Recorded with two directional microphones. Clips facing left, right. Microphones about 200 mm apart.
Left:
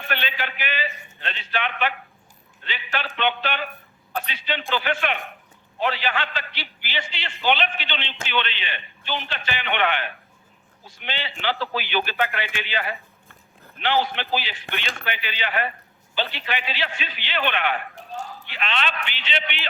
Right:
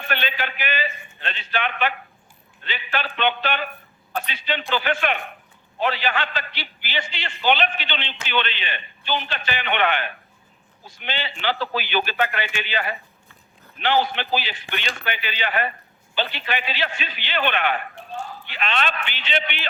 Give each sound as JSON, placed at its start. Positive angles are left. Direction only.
{"t": 0.1, "sound": "a man's voice", "side_deg": -45}
{"t": 17.9, "sound": "a sound", "side_deg": 40}
{"t": 18.5, "sound": "a man's voice", "side_deg": -45}